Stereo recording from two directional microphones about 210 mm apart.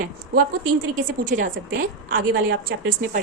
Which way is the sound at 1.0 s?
40° right (ahead or behind).